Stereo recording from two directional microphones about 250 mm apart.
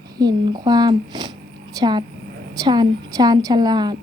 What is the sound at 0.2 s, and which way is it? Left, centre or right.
A woman's voice, centre.